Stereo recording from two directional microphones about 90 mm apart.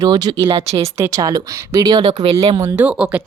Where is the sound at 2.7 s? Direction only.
15° right (ahead or behind).